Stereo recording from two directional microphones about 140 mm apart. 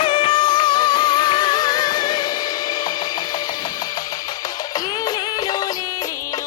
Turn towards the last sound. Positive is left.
turn(degrees=30)  # may be behind; listen again after turning